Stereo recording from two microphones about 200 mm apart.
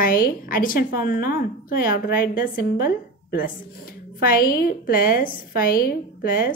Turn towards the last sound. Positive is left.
turn(degrees=45)  # may be behind; listen again after turning